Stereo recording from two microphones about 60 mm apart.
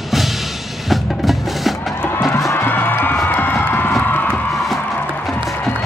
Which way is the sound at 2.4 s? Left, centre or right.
Left.